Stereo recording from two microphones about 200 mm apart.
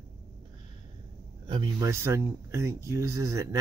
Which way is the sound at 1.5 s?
20° right (ahead or behind).